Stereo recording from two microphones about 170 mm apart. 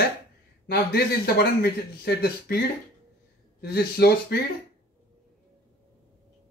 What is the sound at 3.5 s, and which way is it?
Speech, 70° left (ahead or behind).